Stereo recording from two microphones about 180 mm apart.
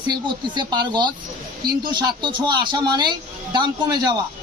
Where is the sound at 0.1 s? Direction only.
25° right (ahead or behind).